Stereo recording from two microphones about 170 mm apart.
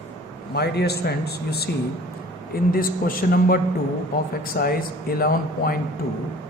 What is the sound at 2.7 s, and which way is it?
Speech, 60° left (ahead or behind).